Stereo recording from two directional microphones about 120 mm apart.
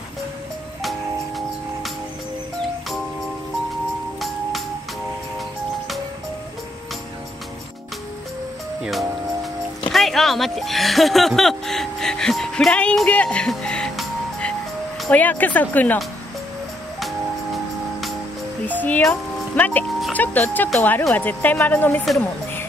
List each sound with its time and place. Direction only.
0.8 s music: centre (ahead or behind)
4.2 s music: centre (ahead or behind)
9.9 s speech: centre (ahead or behind)
18.7 s speech: 15° left (ahead or behind)
22.2 s music: 20° left (ahead or behind)